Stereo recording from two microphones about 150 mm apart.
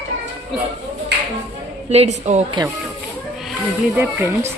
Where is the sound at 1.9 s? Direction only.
45° right (ahead or behind).